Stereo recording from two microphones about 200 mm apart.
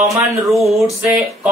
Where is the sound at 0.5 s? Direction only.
Centre (ahead or behind).